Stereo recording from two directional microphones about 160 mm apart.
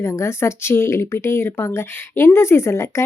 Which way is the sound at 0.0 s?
15° left (ahead or behind).